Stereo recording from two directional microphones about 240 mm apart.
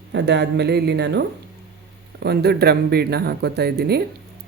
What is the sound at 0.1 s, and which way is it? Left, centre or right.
Speech, right.